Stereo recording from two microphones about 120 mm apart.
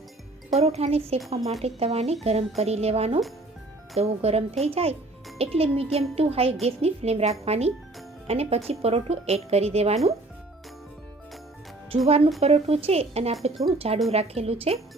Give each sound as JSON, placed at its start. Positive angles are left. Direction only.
{"t": 0.5, "sound": "speech", "side_deg": -60}
{"t": 12.0, "sound": "speech", "side_deg": -60}